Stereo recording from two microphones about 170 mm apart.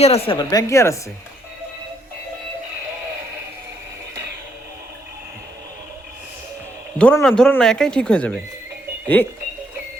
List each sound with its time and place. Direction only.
0.0 s speech: 35° left (ahead or behind); by 0.9 s 15° left (ahead or behind)
7.0 s a man's voice: 10° left (ahead or behind)